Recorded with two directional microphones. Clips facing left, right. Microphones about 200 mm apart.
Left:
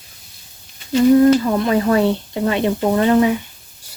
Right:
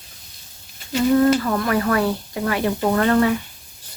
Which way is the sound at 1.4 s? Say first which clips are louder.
Left 4 dB; 20° left (ahead or behind).